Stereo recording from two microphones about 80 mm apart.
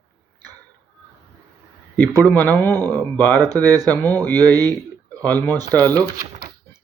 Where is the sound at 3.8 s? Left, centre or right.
Left.